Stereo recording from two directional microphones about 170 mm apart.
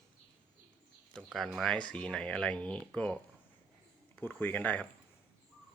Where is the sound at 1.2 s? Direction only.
Centre (ahead or behind).